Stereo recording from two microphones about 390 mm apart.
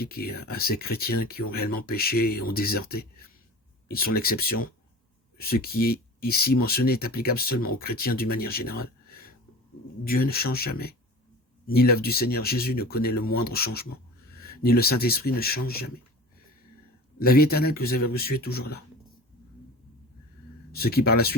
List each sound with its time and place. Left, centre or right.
0.0 s speech: left
17.2 s speech: left
20.7 s speech: left